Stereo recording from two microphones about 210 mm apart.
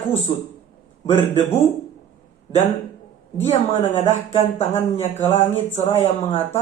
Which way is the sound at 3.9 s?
30° left (ahead or behind).